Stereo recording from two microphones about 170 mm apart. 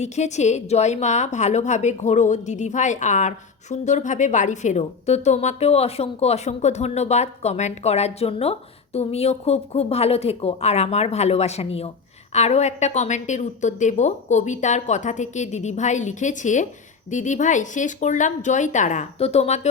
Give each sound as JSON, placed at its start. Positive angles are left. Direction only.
{"t": 0.0, "sound": "a woman's voice", "side_deg": 40}